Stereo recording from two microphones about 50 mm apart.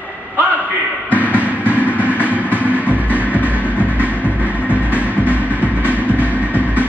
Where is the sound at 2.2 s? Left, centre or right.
Right.